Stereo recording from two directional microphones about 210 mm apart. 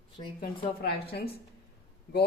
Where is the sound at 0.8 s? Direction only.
50° left (ahead or behind).